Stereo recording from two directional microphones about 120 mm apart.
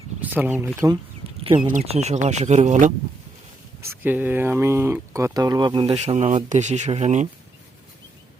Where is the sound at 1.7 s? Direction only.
65° right (ahead or behind); by 2.9 s 80° right.